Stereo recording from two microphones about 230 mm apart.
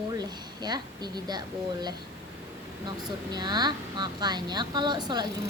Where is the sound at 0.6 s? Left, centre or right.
Centre.